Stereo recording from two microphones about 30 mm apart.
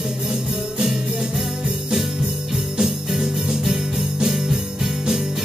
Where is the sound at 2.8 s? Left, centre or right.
Centre.